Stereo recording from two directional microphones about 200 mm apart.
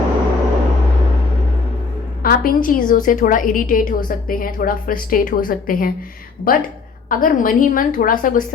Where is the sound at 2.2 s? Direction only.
45° left (ahead or behind).